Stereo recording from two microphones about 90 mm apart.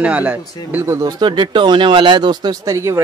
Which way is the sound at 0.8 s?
35° right (ahead or behind).